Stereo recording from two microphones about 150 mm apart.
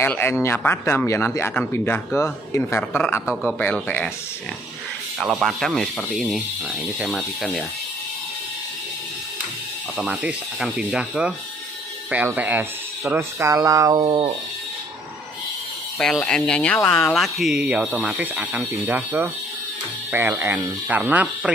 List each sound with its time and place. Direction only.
0.0 s speech: 15° left (ahead or behind)
5.2 s speech: 5° right (ahead or behind)
9.9 s speech: 5° right (ahead or behind); by 14.3 s 35° right (ahead or behind)
16.0 s speech: 5° left (ahead or behind)